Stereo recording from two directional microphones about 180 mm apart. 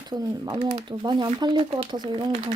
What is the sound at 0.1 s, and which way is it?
Speech, 25° right (ahead or behind).